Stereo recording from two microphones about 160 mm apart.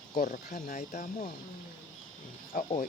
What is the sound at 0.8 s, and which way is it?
Speech, 50° left (ahead or behind).